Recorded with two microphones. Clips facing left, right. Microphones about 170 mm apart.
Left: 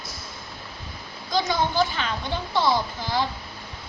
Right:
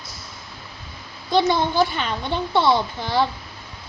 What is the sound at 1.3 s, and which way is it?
Speech, 60° right (ahead or behind).